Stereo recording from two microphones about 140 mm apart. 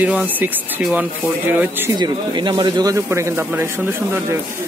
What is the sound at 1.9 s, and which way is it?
Speech, 30° right (ahead or behind).